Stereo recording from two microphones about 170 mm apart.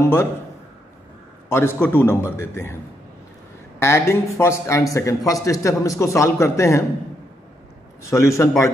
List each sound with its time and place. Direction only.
0.0 s a man's voice: 15° left (ahead or behind)
1.5 s a man's voice: 15° left (ahead or behind)
3.8 s a man's voice: 15° left (ahead or behind)
8.0 s a man's voice: 15° left (ahead or behind)